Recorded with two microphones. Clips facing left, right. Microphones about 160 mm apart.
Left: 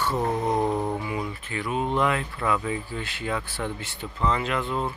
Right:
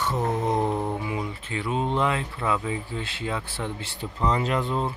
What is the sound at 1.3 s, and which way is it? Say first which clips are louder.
Speech: right 1 dB; 25° right (ahead or behind).